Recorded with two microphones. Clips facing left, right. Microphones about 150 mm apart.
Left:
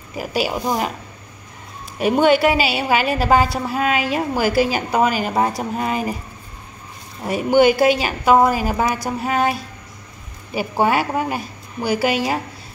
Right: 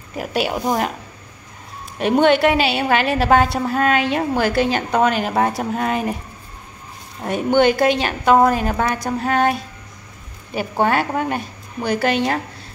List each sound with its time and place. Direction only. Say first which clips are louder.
0.1 s a woman's voice: even; 5° left (ahead or behind)
2.0 s a woman's voice: even; 5° left (ahead or behind)
7.2 s a woman's voice: left 1 dB; 5° left (ahead or behind)